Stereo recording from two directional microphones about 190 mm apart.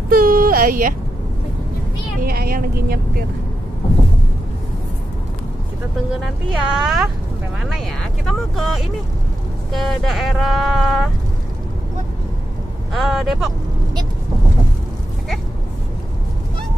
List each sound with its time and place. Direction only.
0.1 s a sound: 50° right (ahead or behind)
2.2 s speech: 50° right (ahead or behind)
6.7 s speech: 5° right (ahead or behind)
12.9 s speech: centre (ahead or behind)